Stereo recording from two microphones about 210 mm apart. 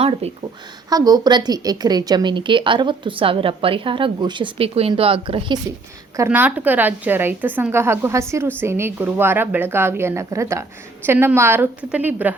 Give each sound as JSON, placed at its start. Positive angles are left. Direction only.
{"t": 0.0, "sound": "a woman's voice", "side_deg": -30}
{"t": 0.9, "sound": "a woman's voice", "side_deg": -20}
{"t": 6.1, "sound": "a woman's voice", "side_deg": -10}